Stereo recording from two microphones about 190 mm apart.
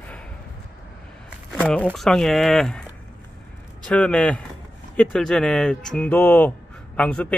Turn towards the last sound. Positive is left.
turn(degrees=5)  # may be behind; listen again after turning